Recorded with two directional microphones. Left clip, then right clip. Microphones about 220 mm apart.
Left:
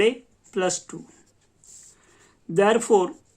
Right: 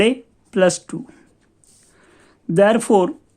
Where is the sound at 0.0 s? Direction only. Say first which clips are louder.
Right 4 dB; 40° right (ahead or behind).